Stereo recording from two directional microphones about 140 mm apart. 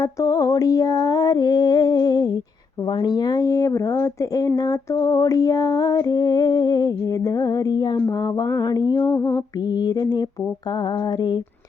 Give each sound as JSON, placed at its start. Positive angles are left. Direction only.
{"t": 0.0, "sound": "speech", "side_deg": 25}
{"t": 10.7, "sound": "mantra", "side_deg": 30}